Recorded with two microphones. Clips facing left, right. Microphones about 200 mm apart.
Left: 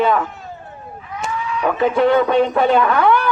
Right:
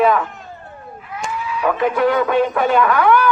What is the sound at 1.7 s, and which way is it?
A man's voice, 25° left (ahead or behind).